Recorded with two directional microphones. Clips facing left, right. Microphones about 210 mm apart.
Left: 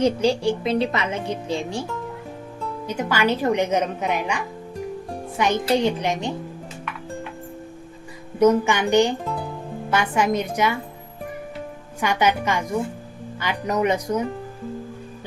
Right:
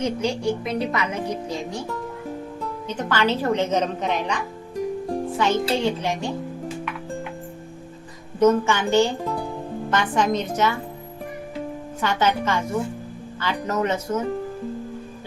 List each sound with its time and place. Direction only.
0.0 s speech: 30° left (ahead or behind)
2.8 s speech: 10° left (ahead or behind)
8.4 s speech: 15° left (ahead or behind)
11.9 s speech: 15° left (ahead or behind)